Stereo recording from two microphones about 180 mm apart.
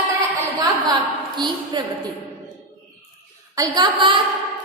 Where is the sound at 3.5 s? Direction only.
20° right (ahead or behind).